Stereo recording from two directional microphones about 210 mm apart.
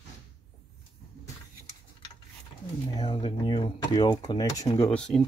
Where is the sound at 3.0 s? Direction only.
25° left (ahead or behind).